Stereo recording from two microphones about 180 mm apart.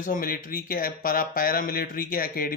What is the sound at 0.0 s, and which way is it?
Speech, 50° left (ahead or behind).